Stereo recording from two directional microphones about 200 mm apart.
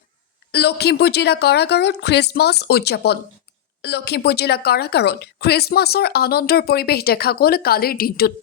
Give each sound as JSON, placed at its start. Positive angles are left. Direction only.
{"t": 0.5, "sound": "a woman's voice", "side_deg": 55}